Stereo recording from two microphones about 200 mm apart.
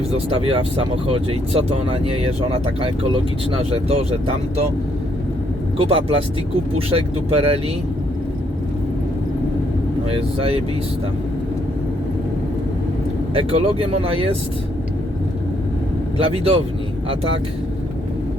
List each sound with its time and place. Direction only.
0.1 s speech: 30° right (ahead or behind)
5.7 s speech: 30° right (ahead or behind)
10.1 s speech: 30° right (ahead or behind)
13.3 s speech: 30° right (ahead or behind)
16.1 s speech: 30° right (ahead or behind)